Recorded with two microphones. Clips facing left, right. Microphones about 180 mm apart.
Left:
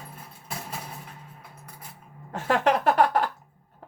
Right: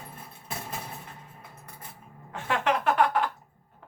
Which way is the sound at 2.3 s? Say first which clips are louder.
Left 4 dB; 40° left (ahead or behind).